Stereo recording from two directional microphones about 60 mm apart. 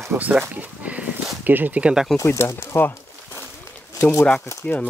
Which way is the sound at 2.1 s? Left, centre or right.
Left.